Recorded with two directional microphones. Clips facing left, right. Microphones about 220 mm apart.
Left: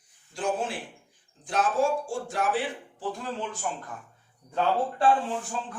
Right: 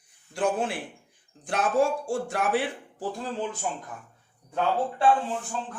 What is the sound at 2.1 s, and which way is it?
Speech, 60° right (ahead or behind).